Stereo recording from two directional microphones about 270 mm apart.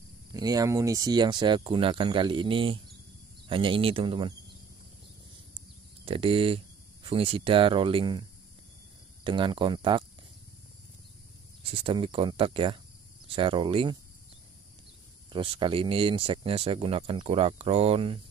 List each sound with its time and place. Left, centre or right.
0.3 s speech: centre
6.0 s speech: centre
11.8 s speech: centre
15.3 s speech: centre